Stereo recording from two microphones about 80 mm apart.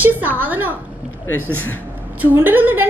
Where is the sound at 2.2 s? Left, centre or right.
Right.